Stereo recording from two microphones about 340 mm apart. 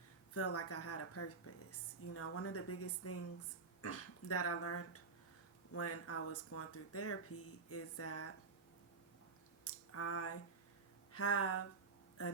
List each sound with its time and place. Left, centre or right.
0.3 s a woman's voice: left
9.6 s a sound: left
11.1 s a woman's voice: left